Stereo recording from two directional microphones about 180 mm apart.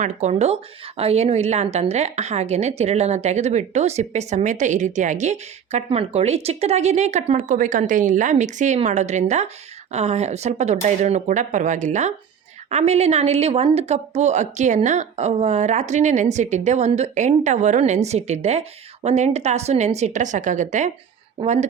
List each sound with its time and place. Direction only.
0.0 s a woman's voice: 40° right (ahead or behind)